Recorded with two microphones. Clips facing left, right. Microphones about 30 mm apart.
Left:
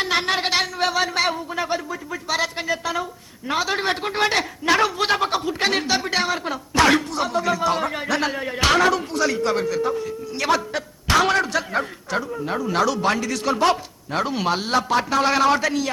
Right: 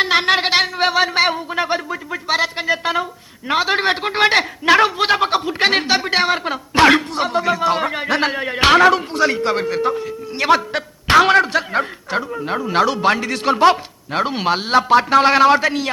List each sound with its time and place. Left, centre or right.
0.0 s a sound: right
10.7 s music: right
12.3 s a man's voice: right